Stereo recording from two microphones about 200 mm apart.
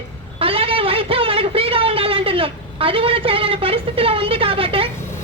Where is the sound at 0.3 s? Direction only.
30° right (ahead or behind).